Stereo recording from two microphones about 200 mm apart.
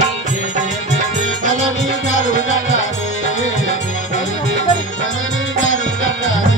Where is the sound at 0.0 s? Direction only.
40° right (ahead or behind).